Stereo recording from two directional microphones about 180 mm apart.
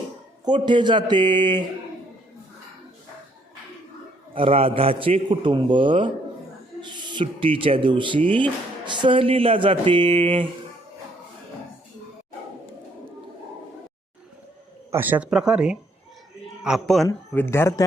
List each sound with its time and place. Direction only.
0.4 s a man's voice: 25° right (ahead or behind)
4.4 s a man's voice: 30° right (ahead or behind)
8.2 s speech: 10° left (ahead or behind)
8.9 s a man's voice: 25° right (ahead or behind)
14.9 s speech: 10° right (ahead or behind)
17.1 s speech: 15° left (ahead or behind)